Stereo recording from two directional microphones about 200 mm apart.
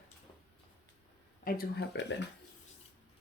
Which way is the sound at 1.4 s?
45° left (ahead or behind).